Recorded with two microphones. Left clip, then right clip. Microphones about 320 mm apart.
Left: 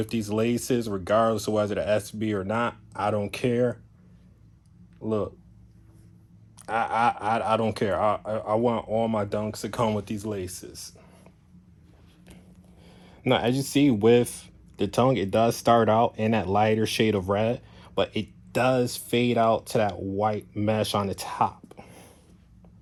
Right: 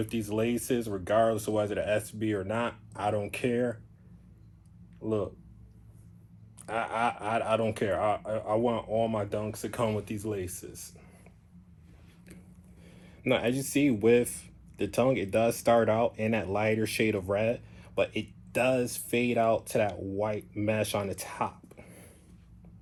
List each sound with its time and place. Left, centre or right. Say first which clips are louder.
0.0 s speech: left 4 dB; left
5.0 s speech: left 3 dB; left
6.7 s speech: left 6 dB; left
12.8 s speech: left 4 dB; left